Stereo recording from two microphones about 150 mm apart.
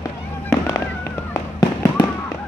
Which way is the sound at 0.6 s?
20° left (ahead or behind).